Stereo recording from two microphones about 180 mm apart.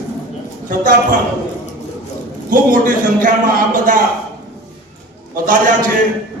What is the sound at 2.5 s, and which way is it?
A man's voice, 50° right (ahead or behind).